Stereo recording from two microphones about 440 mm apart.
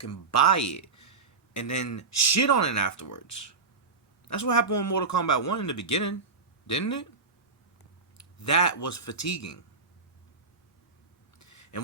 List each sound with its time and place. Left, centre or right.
0.0 s a man's voice: left
8.2 s a man's voice: left
11.3 s a sound: left